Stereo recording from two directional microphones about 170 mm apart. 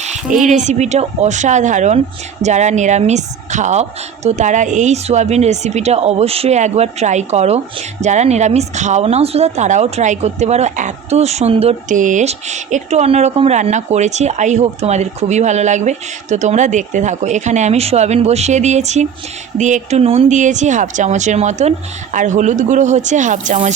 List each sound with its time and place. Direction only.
0.4 s a woman's voice: 45° right (ahead or behind)